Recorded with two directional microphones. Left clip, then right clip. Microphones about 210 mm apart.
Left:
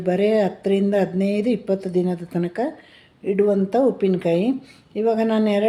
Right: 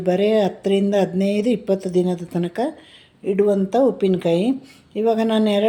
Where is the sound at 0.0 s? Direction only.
Centre (ahead or behind).